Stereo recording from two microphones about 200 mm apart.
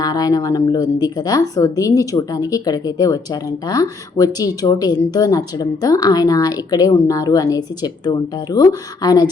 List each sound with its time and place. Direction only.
0.0 s a woman's voice: 20° left (ahead or behind)